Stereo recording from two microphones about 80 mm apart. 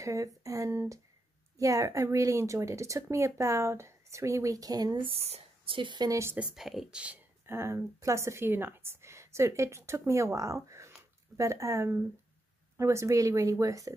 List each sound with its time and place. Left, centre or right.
0.0 s a woman's voice: right
5.7 s speech: right
6.0 s a woman's voice: right
6.5 s speech: centre
7.4 s a woman's voice: right